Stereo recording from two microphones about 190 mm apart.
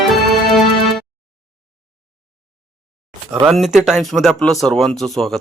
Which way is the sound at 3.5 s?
Centre (ahead or behind).